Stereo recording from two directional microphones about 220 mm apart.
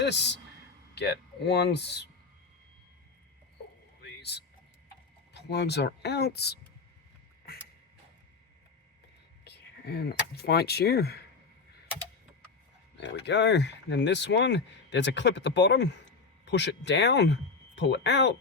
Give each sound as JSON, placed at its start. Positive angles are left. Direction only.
{"t": 0.0, "sound": "a man's voice", "side_deg": 50}
{"t": 4.0, "sound": "a sound", "side_deg": 50}
{"t": 5.3, "sound": "speech", "side_deg": 50}
{"t": 9.4, "sound": "speech", "side_deg": 50}
{"t": 13.0, "sound": "speech", "side_deg": 50}